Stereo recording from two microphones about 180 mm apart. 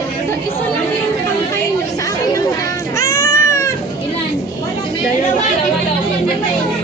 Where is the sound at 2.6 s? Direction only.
20° left (ahead or behind).